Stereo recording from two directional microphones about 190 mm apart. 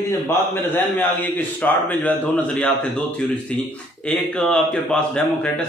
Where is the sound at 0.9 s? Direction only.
10° left (ahead or behind).